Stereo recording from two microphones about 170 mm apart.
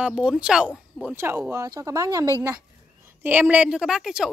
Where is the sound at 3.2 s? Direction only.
10° right (ahead or behind).